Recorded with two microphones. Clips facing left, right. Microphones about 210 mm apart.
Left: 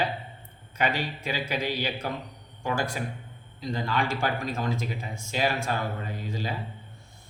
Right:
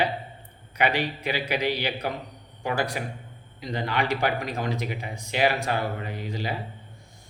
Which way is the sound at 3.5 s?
15° right (ahead or behind).